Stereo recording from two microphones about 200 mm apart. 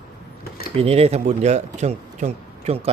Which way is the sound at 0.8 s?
30° right (ahead or behind).